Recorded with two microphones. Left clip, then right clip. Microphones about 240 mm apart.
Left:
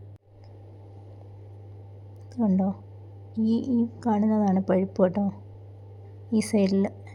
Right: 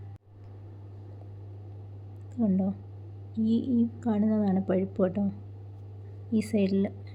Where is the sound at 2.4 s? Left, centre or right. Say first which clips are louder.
Left 3 dB; centre.